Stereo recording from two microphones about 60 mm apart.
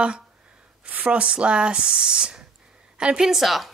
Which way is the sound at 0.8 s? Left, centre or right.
Right.